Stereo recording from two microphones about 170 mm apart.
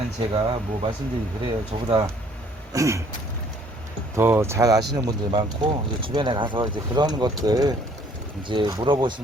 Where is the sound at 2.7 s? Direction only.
15° right (ahead or behind).